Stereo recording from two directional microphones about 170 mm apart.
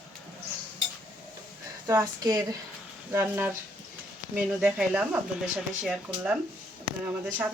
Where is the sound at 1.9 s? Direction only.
20° right (ahead or behind).